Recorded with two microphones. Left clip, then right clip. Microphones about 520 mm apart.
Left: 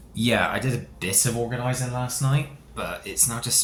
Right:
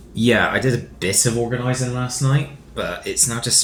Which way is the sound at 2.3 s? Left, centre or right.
Left.